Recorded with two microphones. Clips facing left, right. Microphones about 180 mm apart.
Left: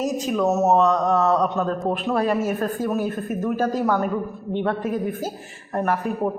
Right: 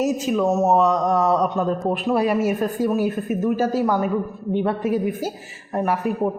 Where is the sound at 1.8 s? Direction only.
Centre (ahead or behind).